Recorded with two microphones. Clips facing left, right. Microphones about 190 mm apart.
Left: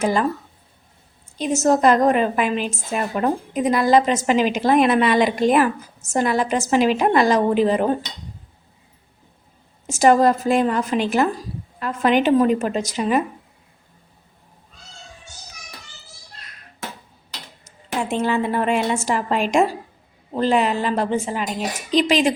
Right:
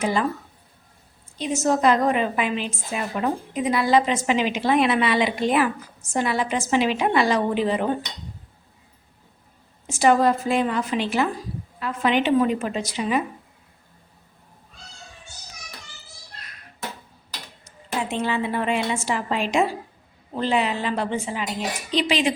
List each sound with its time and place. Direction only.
0.0 s a woman's voice: 45° left (ahead or behind)
1.4 s a woman's voice: 45° left (ahead or behind)
9.8 s a woman's voice: 45° left (ahead or behind)
18.1 s a woman's voice: 45° left (ahead or behind)